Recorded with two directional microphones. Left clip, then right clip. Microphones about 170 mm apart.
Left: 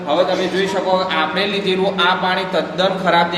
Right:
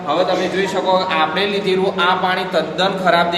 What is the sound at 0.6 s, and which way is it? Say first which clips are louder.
A man's voice: right 1 dB; 35° left (ahead or behind).